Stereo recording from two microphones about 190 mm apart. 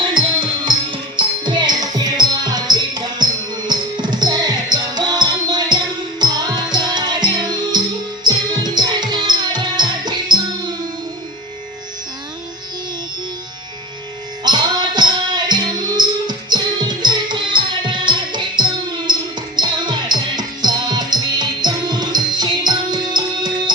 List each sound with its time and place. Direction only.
0.0 s music: 25° right (ahead or behind)
14.4 s music: 20° right (ahead or behind)